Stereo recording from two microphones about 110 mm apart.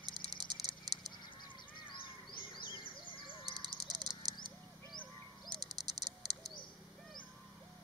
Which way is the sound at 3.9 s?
40° right (ahead or behind).